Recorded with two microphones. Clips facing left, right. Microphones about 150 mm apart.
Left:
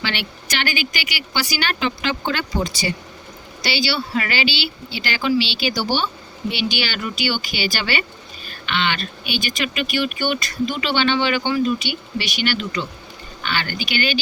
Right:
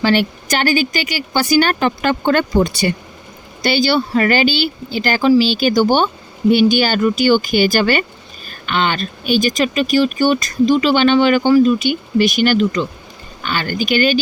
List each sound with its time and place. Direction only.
0.0 s speech: 45° right (ahead or behind); by 2.9 s 60° right (ahead or behind)
3.6 s speech: 50° right (ahead or behind)